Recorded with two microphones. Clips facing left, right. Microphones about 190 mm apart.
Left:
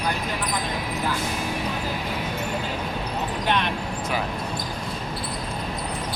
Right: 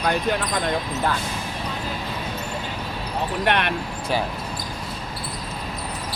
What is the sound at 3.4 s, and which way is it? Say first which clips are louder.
Speech: right 2 dB; 65° right (ahead or behind).